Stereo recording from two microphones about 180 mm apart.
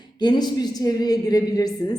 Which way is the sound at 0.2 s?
25° left (ahead or behind).